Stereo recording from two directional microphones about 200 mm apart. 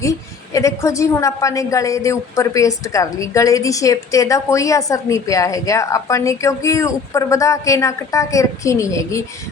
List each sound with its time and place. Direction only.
0.0 s a woman's voice: 15° left (ahead or behind)